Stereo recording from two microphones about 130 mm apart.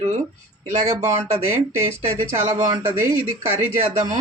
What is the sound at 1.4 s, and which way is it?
Speech, 20° right (ahead or behind).